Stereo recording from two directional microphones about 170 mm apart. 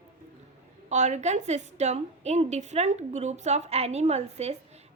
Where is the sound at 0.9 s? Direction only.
45° right (ahead or behind).